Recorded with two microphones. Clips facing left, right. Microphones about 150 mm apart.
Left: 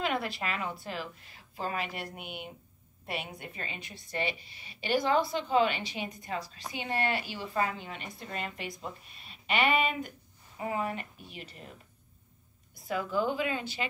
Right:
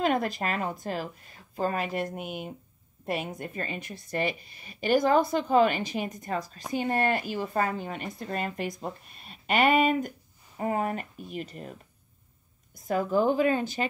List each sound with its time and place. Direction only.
0.0 s a woman's voice: 45° right (ahead or behind)
12.8 s a woman's voice: 45° right (ahead or behind)